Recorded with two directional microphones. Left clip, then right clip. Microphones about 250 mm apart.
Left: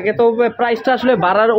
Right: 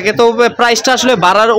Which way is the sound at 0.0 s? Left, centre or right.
Centre.